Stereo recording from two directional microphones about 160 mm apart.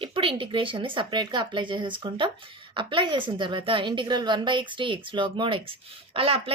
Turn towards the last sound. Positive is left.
turn(degrees=-35)  # may be behind; listen again after turning